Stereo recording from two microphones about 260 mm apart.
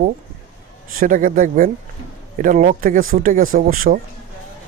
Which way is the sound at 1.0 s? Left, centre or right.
Right.